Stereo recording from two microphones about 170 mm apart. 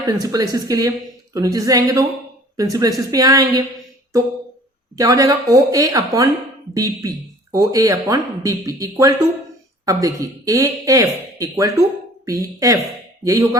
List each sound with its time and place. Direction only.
0.2 s speech: 20° right (ahead or behind)
4.9 s speech: 20° right (ahead or behind)